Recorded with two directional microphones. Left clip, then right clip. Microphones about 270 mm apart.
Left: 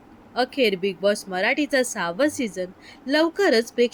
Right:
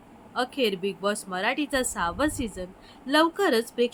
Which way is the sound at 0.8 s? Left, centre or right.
Centre.